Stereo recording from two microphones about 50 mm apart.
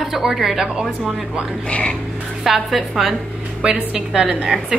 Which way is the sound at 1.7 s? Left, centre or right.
Left.